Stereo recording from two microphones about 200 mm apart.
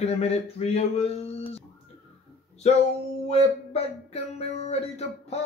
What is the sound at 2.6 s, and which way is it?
Speech, 35° left (ahead or behind).